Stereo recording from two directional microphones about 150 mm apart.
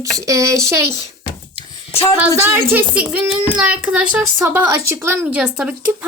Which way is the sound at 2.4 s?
15° right (ahead or behind).